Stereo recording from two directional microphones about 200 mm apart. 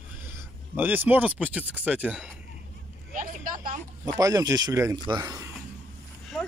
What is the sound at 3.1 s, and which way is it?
Speech, 40° right (ahead or behind).